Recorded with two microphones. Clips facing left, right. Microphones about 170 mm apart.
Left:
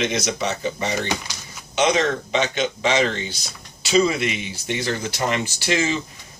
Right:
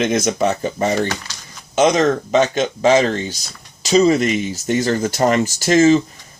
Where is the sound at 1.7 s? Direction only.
45° right (ahead or behind).